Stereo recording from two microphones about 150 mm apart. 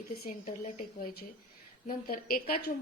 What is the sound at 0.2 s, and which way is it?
A woman's voice, 65° left (ahead or behind).